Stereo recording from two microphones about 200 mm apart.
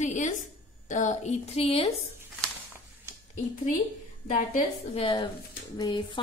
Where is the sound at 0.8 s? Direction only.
35° left (ahead or behind).